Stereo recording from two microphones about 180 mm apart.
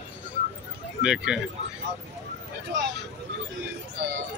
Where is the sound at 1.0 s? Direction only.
5° right (ahead or behind).